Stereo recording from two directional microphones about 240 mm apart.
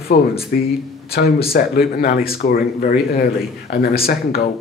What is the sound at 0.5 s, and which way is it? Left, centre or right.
Speech, left.